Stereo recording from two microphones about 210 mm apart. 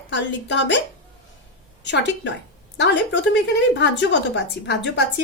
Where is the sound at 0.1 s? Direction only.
60° left (ahead or behind).